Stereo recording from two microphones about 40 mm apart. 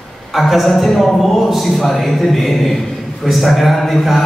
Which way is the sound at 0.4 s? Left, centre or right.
Centre.